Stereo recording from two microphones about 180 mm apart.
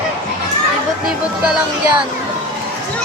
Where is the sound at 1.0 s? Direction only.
5° right (ahead or behind).